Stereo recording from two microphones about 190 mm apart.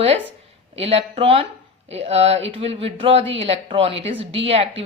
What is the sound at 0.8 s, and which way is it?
Speech, 30° right (ahead or behind).